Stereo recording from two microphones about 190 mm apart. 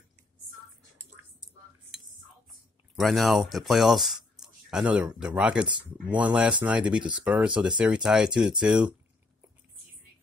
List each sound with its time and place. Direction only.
3.0 s speech: centre (ahead or behind)